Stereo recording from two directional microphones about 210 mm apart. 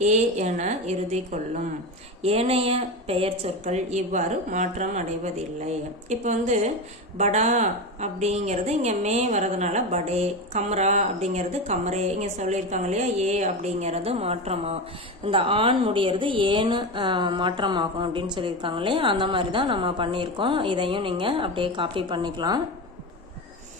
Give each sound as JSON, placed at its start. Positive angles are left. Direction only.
{"t": 0.0, "sound": "a woman's voice", "side_deg": -35}